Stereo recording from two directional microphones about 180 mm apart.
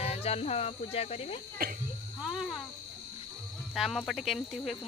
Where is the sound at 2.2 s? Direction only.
Centre (ahead or behind).